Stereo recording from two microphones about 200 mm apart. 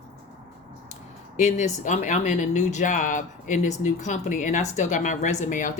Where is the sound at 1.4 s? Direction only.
35° left (ahead or behind).